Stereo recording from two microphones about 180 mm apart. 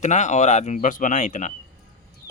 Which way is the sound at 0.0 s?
40° left (ahead or behind).